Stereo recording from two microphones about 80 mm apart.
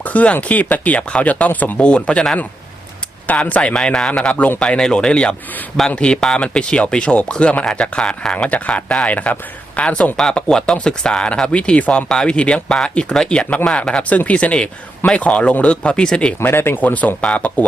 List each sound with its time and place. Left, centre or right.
0.0 s speech: centre
3.2 s speech: centre
16.4 s speech: left